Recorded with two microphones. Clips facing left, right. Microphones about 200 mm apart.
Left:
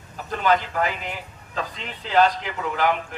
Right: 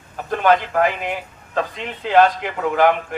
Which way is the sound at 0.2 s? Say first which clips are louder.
Right 5 dB; 55° right (ahead or behind).